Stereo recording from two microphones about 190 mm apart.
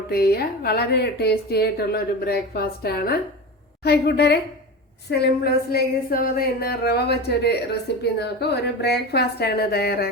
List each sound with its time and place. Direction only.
0.1 s a woman's voice: 55° left (ahead or behind)